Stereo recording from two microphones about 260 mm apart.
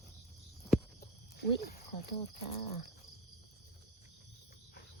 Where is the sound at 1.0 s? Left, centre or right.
Left.